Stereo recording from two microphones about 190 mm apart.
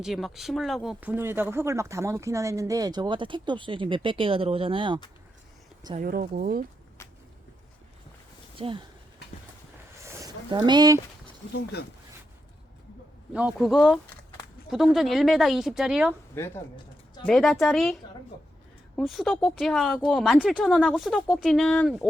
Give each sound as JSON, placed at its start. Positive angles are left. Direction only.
{"t": 0.0, "sound": "speech", "side_deg": 0}
{"t": 6.0, "sound": "speech", "side_deg": -45}
{"t": 8.5, "sound": "speech", "side_deg": -30}
{"t": 10.0, "sound": "a sound", "side_deg": -15}
{"t": 13.3, "sound": "speech", "side_deg": -5}
{"t": 16.4, "sound": "speech", "side_deg": 10}
{"t": 17.2, "sound": "speech", "side_deg": 0}